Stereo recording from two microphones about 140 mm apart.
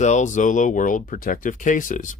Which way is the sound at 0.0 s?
60° left (ahead or behind).